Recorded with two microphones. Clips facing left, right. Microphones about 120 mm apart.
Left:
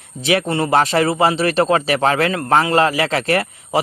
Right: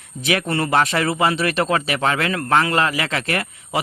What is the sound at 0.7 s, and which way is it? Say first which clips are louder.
Speech: left 4 dB; 35° left (ahead or behind).